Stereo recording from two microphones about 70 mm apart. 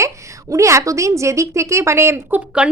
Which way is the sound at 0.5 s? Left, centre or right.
Right.